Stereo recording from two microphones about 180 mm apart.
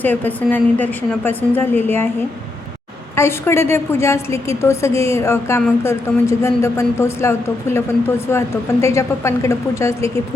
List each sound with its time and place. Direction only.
0.0 s a woman's voice: 10° left (ahead or behind)
3.2 s a woman's voice: 15° left (ahead or behind)